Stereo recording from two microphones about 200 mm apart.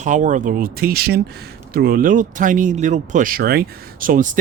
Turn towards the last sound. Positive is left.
turn(degrees=-40)  # may be behind; listen again after turning